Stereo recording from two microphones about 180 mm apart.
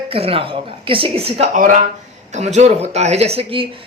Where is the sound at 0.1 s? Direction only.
30° right (ahead or behind).